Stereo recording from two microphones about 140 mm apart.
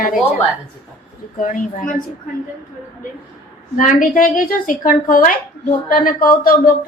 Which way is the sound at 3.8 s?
70° left (ahead or behind).